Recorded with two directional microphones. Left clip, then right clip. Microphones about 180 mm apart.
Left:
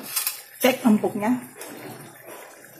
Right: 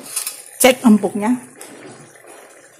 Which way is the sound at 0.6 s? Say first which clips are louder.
Right 8 dB; 60° right (ahead or behind).